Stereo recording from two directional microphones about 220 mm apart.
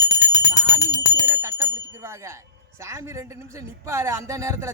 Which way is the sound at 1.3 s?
10° right (ahead or behind).